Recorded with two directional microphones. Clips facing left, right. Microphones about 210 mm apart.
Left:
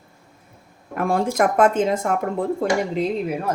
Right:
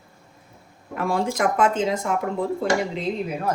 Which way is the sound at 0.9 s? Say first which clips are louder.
Left 3 dB; 50° left (ahead or behind).